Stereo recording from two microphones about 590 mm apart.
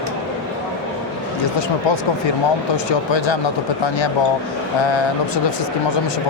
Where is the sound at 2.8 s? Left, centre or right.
Left.